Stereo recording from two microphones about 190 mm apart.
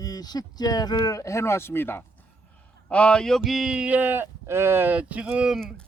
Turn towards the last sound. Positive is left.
turn(degrees=0)  # may be behind; listen again after turning